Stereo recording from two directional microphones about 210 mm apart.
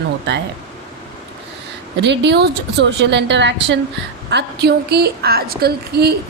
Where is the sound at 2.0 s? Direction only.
55° right (ahead or behind).